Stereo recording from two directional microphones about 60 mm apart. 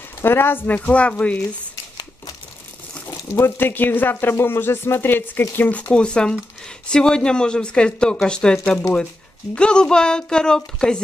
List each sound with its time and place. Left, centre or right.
0.2 s speech: left
0.8 s speech: left
3.3 s speech: left
5.9 s a woman's voice: centre
9.6 s a woman's voice: centre